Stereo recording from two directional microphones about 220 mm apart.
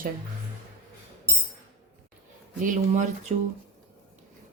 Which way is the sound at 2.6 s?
35° right (ahead or behind).